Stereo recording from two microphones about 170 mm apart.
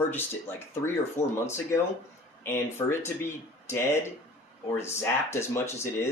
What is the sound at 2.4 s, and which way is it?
Speech, 15° left (ahead or behind).